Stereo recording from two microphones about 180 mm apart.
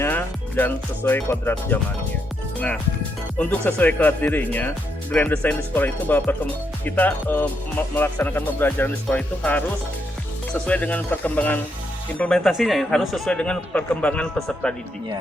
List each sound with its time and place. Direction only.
0.0 s speech: 10° left (ahead or behind)
3.3 s speech: 10° left (ahead or behind)